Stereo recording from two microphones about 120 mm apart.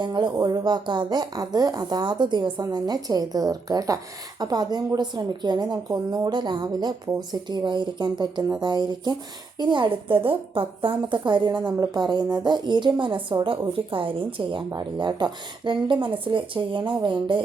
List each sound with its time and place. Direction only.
0.0 s speech: 40° right (ahead or behind)